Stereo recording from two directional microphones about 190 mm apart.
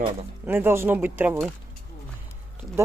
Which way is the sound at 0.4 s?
10° right (ahead or behind).